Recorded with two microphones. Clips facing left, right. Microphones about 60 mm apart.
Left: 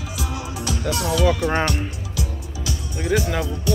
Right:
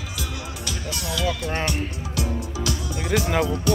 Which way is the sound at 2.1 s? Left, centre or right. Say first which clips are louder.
Right 3 dB; right.